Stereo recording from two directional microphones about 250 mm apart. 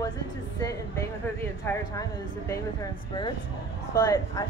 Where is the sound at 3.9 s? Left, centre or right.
Centre.